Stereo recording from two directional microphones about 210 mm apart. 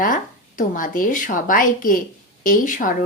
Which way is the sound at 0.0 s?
40° left (ahead or behind).